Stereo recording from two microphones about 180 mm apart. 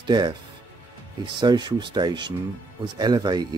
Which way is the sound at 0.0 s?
25° right (ahead or behind).